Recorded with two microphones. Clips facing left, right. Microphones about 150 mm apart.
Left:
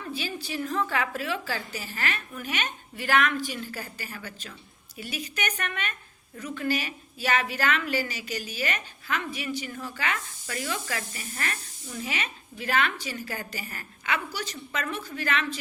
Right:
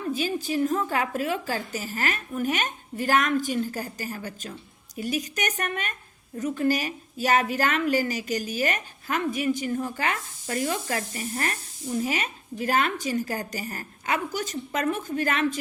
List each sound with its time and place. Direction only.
0.0 s speech: 45° right (ahead or behind)